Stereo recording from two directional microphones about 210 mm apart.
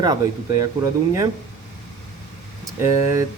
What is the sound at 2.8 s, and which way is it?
Speech, 15° right (ahead or behind).